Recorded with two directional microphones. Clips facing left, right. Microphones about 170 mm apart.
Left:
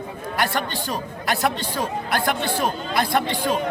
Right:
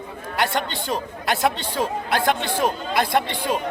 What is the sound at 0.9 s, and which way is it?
Speech, 25° right (ahead or behind).